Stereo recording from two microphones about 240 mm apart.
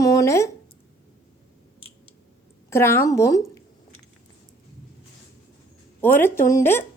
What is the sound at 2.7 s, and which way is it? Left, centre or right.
Speech, centre.